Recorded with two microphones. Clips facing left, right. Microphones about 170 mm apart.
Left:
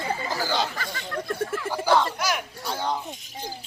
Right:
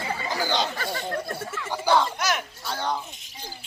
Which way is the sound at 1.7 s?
5° left (ahead or behind).